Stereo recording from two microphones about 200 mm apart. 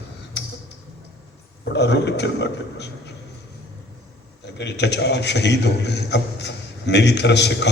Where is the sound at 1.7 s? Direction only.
60° left (ahead or behind).